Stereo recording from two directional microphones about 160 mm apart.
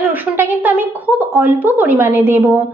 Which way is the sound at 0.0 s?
10° right (ahead or behind).